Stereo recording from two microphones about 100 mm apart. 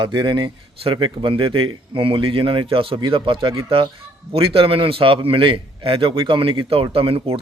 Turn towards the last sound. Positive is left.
turn(degrees=-65)  # may be behind; listen again after turning